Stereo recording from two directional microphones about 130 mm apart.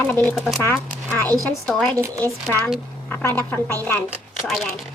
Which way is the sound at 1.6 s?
10° left (ahead or behind).